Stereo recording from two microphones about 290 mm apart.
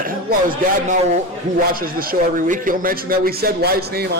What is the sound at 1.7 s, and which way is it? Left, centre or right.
A man's voice, right.